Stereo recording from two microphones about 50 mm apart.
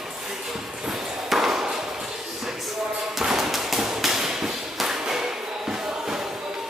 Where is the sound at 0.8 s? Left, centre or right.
Centre.